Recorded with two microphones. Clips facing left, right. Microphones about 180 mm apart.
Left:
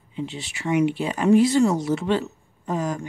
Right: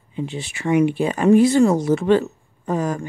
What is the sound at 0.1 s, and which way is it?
Speech, 50° right (ahead or behind).